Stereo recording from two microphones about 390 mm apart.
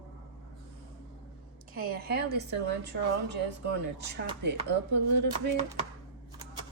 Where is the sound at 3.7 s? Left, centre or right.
Right.